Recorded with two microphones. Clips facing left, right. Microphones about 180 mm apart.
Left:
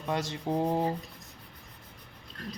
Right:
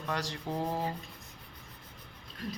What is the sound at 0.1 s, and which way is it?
Speech, 20° left (ahead or behind).